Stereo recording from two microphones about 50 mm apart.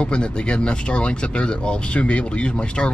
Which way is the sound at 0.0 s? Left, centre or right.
Left.